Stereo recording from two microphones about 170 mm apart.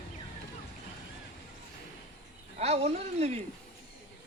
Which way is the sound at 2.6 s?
35° right (ahead or behind).